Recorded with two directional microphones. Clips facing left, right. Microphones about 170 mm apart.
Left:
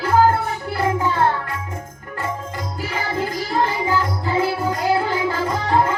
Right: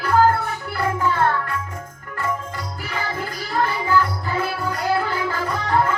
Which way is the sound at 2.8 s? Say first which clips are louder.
Left 4 dB; 20° left (ahead or behind).